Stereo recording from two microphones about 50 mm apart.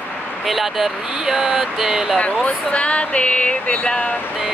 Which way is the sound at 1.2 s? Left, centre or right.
Centre.